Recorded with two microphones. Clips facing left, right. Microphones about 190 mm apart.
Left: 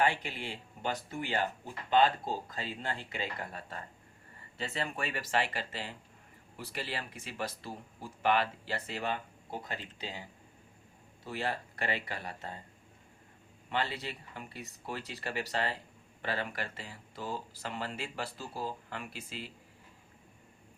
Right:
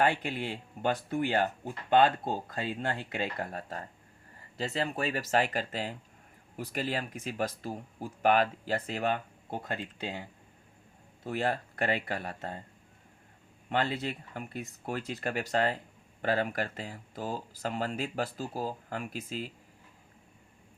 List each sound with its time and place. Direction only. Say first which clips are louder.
0.0 s speech: right 3 dB; 50° right (ahead or behind)
13.7 s speech: right 5 dB; 50° right (ahead or behind)